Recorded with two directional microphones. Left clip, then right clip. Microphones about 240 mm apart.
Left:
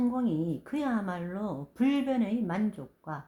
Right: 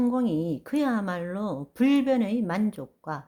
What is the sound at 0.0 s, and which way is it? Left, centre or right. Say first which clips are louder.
A woman's voice: right 4 dB; right.